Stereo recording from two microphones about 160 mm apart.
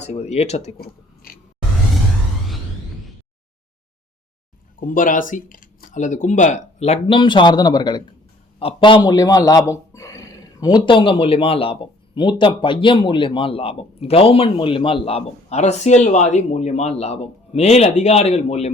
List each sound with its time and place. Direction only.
0.0 s speech: 45° left (ahead or behind)
0.8 s a sound: 65° left (ahead or behind)
4.8 s speech: 55° left (ahead or behind)